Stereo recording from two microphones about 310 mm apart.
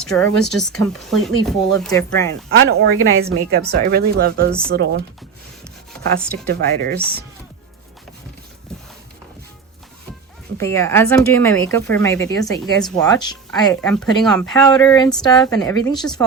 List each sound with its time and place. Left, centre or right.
0.0 s speech: centre
2.6 s speech: right
6.3 s a woman's voice: right
10.6 s speech: centre
13.8 s speech: centre